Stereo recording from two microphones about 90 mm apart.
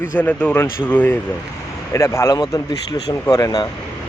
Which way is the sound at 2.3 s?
50° left (ahead or behind).